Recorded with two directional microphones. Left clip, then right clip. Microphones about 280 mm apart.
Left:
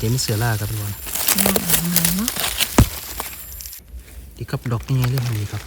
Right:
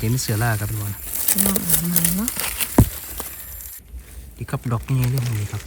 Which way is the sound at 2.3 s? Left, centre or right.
Left.